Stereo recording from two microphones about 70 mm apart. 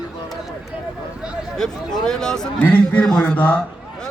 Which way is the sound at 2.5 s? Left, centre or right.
Centre.